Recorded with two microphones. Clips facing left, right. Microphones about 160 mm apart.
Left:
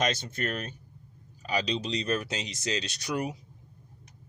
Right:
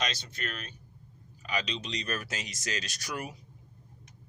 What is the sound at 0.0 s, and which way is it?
Speech, 50° left (ahead or behind).